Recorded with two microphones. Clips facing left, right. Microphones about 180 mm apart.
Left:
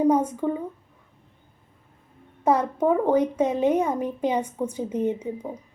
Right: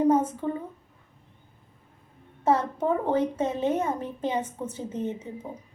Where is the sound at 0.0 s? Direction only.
15° left (ahead or behind).